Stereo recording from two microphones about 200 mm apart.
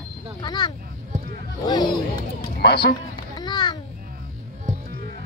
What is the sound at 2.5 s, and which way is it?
Speech, 50° left (ahead or behind).